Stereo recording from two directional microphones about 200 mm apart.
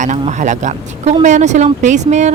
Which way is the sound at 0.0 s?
35° right (ahead or behind).